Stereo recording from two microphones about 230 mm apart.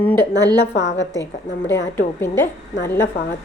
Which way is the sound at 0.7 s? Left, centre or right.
Left.